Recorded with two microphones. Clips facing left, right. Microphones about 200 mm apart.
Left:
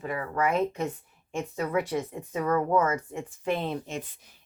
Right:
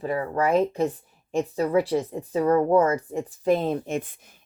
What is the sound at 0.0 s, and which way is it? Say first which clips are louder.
A woman's voice: right 4 dB; 30° right (ahead or behind).